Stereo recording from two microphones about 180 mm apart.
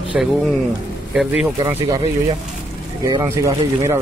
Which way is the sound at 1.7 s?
15° right (ahead or behind).